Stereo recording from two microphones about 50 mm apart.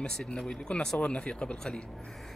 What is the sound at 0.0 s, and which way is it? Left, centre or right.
Speech, centre.